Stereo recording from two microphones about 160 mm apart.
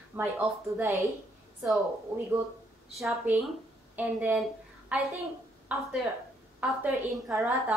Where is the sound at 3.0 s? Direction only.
10° right (ahead or behind).